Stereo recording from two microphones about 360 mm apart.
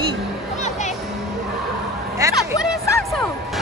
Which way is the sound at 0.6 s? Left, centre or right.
Centre.